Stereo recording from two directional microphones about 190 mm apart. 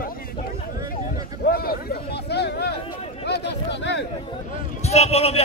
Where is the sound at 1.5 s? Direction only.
50° left (ahead or behind).